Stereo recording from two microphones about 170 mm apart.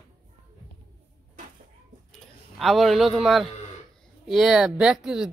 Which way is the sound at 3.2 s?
Centre (ahead or behind).